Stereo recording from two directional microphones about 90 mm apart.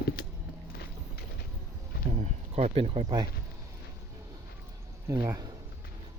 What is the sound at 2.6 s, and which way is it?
Speech, 90° right.